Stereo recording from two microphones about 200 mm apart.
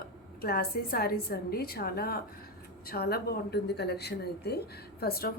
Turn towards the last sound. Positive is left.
turn(degrees=50)  # may be behind; listen again after turning